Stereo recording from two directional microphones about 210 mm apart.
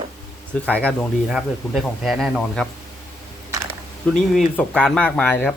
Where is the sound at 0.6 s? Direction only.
5° left (ahead or behind).